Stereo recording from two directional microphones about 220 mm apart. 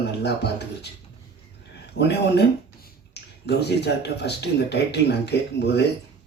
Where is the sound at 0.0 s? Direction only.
50° left (ahead or behind).